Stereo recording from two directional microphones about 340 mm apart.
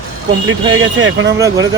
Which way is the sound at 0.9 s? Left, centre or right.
Right.